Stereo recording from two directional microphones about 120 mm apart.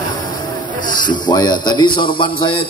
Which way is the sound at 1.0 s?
35° left (ahead or behind).